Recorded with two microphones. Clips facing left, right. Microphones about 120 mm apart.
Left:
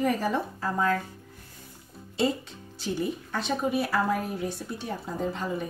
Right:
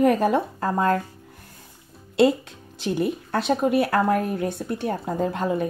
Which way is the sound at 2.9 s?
65° right (ahead or behind).